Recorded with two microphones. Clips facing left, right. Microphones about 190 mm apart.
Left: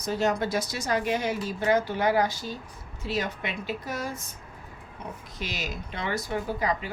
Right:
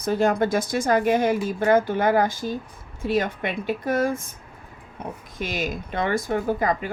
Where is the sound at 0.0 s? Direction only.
55° right (ahead or behind).